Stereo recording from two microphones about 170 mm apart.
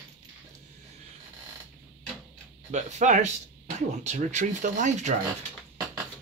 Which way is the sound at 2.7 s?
45° right (ahead or behind).